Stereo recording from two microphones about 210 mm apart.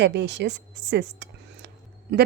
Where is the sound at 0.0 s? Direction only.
55° right (ahead or behind).